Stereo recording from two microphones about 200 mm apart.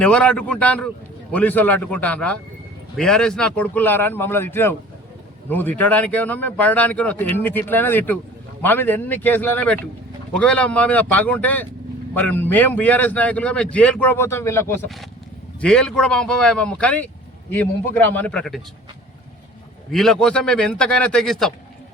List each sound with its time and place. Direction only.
0.0 s a man's voice: 5° left (ahead or behind)
19.9 s a man's voice: centre (ahead or behind)